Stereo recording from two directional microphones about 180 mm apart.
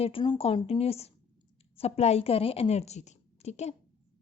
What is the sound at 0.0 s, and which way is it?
Speech, 30° left (ahead or behind).